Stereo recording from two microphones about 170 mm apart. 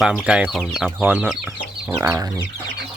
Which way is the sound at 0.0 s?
5° right (ahead or behind).